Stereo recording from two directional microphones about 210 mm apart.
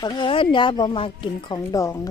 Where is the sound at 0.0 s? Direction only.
20° left (ahead or behind).